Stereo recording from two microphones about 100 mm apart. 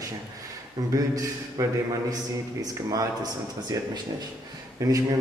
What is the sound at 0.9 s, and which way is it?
Speech, 35° right (ahead or behind).